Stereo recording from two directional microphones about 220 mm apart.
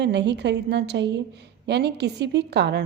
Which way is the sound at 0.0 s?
50° right (ahead or behind).